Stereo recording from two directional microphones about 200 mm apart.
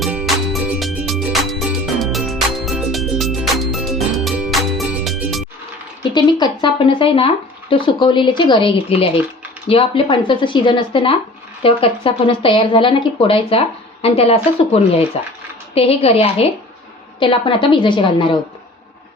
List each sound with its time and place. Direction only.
0.0 s music: 5° right (ahead or behind)
6.0 s a sound: 20° left (ahead or behind)
7.7 s a woman's voice: 25° left (ahead or behind)